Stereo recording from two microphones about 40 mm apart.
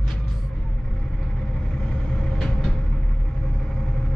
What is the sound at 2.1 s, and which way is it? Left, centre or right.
Vehicle, centre.